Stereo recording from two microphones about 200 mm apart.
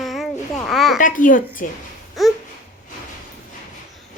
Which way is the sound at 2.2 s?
Centre (ahead or behind).